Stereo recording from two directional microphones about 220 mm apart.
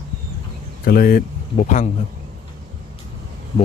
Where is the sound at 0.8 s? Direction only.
40° left (ahead or behind).